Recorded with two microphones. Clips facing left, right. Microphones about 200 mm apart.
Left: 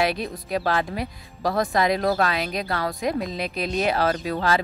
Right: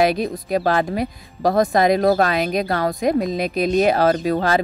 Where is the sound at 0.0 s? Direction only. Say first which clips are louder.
Right 6 dB; 45° right (ahead or behind).